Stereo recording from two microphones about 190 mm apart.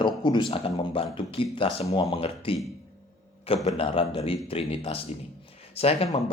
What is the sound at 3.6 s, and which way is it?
Speech, 30° left (ahead or behind).